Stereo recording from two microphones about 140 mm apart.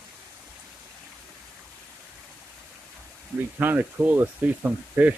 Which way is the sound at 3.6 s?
10° right (ahead or behind).